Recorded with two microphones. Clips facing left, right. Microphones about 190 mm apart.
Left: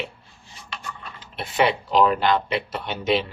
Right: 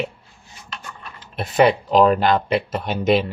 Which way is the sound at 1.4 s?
40° right (ahead or behind).